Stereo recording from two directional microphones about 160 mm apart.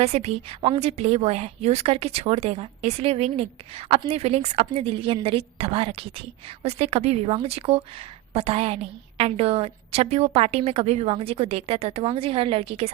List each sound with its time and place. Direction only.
0.0 s a woman's voice: 40° right (ahead or behind)